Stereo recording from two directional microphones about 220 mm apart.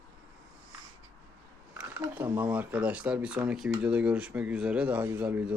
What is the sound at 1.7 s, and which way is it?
Speech, 5° right (ahead or behind).